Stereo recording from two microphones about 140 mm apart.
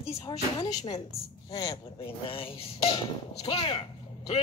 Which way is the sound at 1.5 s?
25° left (ahead or behind).